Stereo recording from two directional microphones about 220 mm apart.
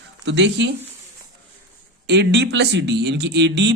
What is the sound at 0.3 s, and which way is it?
Speech, 55° right (ahead or behind).